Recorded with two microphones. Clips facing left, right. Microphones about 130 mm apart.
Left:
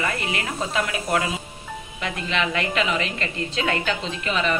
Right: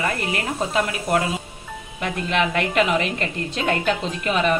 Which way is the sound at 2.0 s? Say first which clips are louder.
Right 4 dB; 50° right (ahead or behind).